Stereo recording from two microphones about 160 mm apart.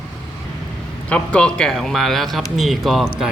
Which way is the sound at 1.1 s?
10° left (ahead or behind).